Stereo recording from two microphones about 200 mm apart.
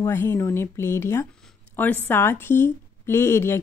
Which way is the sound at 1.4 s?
10° left (ahead or behind).